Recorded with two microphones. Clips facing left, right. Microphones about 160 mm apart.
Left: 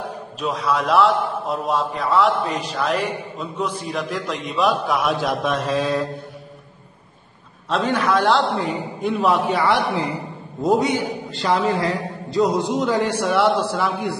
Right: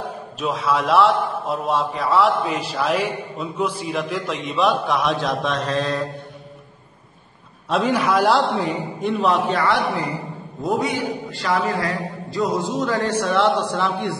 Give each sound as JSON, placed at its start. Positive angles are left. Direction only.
{"t": 0.4, "sound": "a man's voice", "side_deg": 0}
{"t": 7.7, "sound": "a man's voice", "side_deg": -10}
{"t": 9.6, "sound": "a man's voice", "side_deg": 20}